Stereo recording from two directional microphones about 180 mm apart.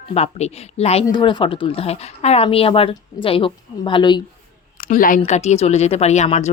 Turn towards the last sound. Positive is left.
turn(degrees=35)  # may be behind; listen again after turning